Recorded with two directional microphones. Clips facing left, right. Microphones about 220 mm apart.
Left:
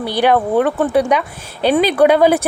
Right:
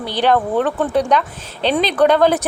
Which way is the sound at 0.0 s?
10° left (ahead or behind).